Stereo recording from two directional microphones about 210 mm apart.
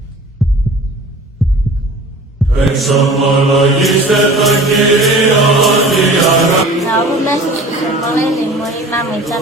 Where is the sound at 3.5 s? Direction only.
Centre (ahead or behind).